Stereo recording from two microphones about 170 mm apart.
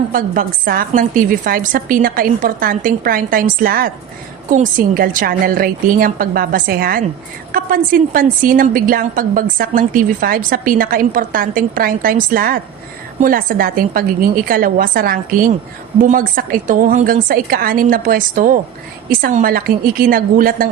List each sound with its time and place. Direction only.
0.1 s a woman's voice: 55° right (ahead or behind)